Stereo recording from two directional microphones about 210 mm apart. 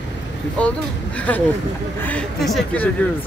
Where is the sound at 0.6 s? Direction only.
5° left (ahead or behind).